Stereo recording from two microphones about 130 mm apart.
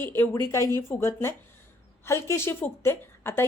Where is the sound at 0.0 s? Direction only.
15° left (ahead or behind).